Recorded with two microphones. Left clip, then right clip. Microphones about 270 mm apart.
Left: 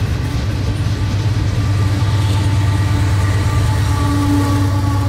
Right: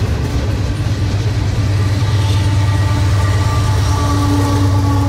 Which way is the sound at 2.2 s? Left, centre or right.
Centre.